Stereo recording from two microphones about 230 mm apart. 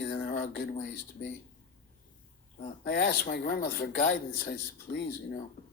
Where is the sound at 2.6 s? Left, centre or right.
Left.